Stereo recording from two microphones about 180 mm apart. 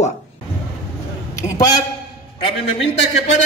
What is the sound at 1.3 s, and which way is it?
Speech, 15° left (ahead or behind).